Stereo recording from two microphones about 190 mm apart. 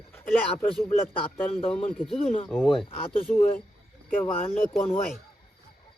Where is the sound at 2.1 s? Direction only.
30° left (ahead or behind).